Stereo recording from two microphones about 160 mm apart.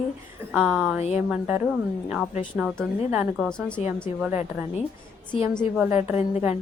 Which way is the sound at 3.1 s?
10° right (ahead or behind).